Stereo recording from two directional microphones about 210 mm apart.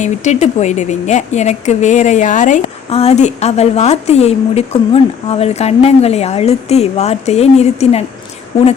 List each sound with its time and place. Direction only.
0.0 s speech: 35° left (ahead or behind)